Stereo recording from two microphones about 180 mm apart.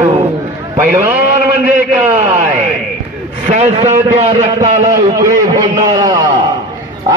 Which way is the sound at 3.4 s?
35° right (ahead or behind).